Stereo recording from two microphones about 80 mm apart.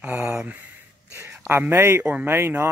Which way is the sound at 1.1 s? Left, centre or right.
Right.